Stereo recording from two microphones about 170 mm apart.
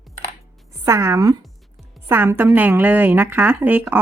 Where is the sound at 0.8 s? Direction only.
15° right (ahead or behind).